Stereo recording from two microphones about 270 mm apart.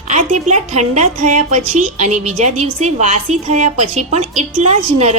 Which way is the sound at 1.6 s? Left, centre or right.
Right.